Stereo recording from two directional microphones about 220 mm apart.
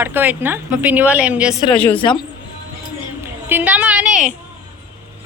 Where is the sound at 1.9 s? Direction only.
20° left (ahead or behind).